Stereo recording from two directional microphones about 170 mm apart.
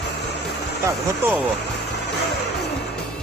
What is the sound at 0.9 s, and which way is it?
Speech, 10° right (ahead or behind).